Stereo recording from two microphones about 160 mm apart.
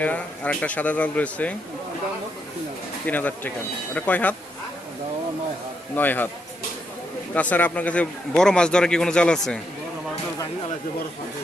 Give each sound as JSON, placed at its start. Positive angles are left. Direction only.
{"t": 0.0, "sound": "speech", "side_deg": 10}
{"t": 3.1, "sound": "speech", "side_deg": 10}
{"t": 6.0, "sound": "speech", "side_deg": 10}
{"t": 7.3, "sound": "a man's voice", "side_deg": 10}